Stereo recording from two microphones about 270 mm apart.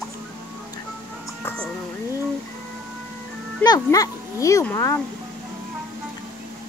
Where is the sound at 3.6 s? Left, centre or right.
Centre.